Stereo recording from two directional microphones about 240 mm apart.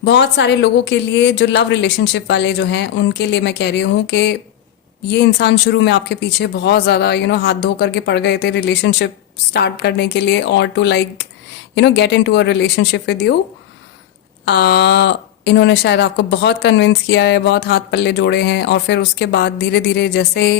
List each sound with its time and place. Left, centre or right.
0.0 s speech: left
14.4 s speech: left